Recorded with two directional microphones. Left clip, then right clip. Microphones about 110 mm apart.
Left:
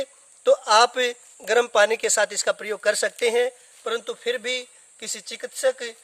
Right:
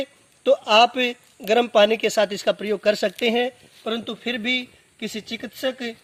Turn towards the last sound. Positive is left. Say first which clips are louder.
# left 3 dB
turn(degrees=45)  # may be behind; listen again after turning